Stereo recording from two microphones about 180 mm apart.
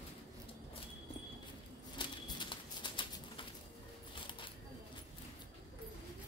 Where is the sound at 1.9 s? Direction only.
25° left (ahead or behind).